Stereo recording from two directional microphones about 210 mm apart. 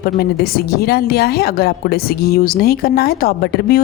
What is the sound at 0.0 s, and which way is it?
Speech, 50° left (ahead or behind).